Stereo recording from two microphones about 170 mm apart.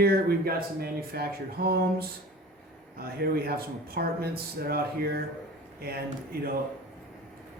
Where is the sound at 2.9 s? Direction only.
65° right (ahead or behind).